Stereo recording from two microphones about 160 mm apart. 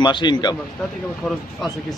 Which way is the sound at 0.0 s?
30° left (ahead or behind).